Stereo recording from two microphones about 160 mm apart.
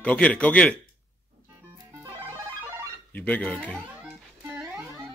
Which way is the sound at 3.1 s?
10° left (ahead or behind).